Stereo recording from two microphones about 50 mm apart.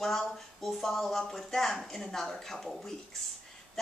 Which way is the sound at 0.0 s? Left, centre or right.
Centre.